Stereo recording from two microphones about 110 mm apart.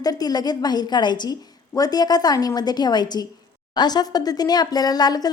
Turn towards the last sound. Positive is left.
turn(degrees=35)  # may be behind; listen again after turning